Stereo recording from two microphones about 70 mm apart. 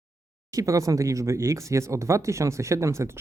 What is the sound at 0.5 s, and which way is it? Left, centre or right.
Speech, right.